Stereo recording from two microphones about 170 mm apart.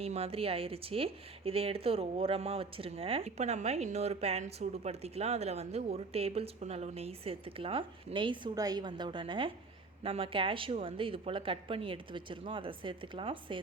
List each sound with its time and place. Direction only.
0.0 s speech: 35° right (ahead or behind)